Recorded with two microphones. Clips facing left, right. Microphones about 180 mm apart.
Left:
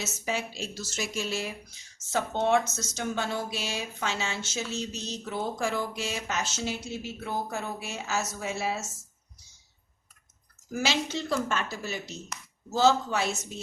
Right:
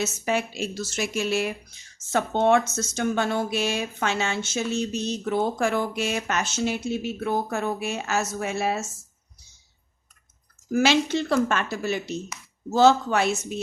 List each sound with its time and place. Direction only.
0.0 s speech: 60° right (ahead or behind)
10.7 s speech: 65° right (ahead or behind)